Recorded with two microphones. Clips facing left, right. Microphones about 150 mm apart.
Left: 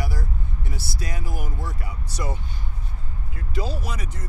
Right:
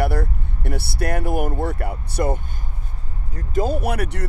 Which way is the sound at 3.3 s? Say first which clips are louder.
Right 8 dB; 45° right (ahead or behind).